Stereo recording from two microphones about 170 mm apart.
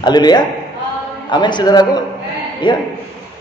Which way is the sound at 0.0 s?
25° left (ahead or behind).